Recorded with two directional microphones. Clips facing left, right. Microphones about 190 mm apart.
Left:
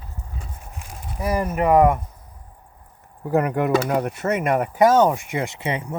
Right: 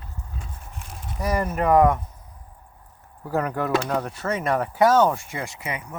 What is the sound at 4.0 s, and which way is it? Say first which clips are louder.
Speech: left 4 dB; 20° left (ahead or behind).